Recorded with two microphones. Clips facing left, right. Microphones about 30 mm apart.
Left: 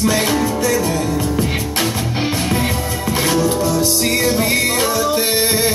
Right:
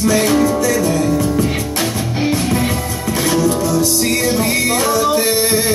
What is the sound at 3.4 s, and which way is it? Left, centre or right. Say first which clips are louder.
Music: right 1 dB; left.